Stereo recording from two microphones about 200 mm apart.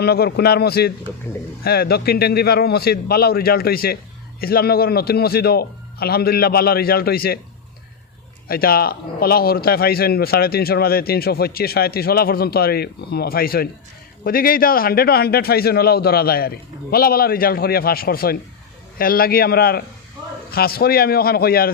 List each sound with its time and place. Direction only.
0.0 s a man's voice: 50° left (ahead or behind)
8.4 s a man's voice: 50° left (ahead or behind)